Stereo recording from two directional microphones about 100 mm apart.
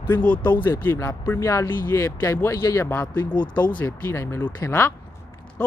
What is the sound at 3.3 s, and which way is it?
Speech, 50° left (ahead or behind).